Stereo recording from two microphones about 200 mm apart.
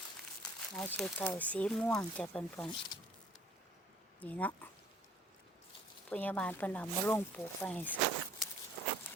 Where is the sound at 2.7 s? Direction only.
25° left (ahead or behind).